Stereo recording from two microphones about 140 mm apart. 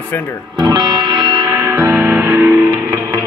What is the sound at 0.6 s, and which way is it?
Music, 35° right (ahead or behind).